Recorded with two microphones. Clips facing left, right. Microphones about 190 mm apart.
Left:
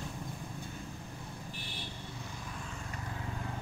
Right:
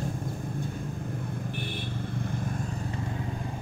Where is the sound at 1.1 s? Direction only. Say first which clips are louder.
Right 10 dB; 55° right (ahead or behind).